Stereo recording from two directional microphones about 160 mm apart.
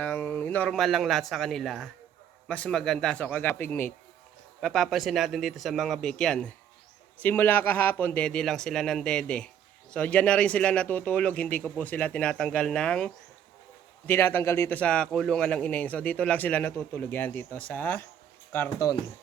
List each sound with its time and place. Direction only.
0.0 s a man's voice: 10° left (ahead or behind)
4.6 s a man's voice: centre (ahead or behind); by 18.9 s 15° left (ahead or behind)